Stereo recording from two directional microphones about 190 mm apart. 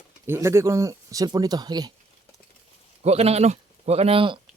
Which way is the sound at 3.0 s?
35° right (ahead or behind).